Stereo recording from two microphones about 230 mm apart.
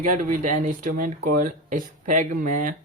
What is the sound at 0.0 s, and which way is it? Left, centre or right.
Speech, right.